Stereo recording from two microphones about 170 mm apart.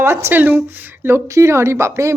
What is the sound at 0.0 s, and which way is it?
Speech, 15° right (ahead or behind).